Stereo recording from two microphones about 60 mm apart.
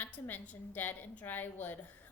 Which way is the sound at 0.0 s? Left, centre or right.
Left.